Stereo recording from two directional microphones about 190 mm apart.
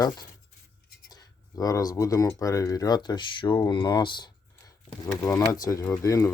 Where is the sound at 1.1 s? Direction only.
20° left (ahead or behind).